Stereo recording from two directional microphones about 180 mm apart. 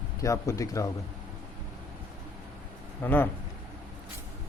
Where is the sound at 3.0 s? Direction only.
10° left (ahead or behind).